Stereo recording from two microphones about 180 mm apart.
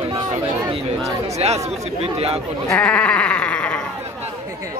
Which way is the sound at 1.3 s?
35° right (ahead or behind).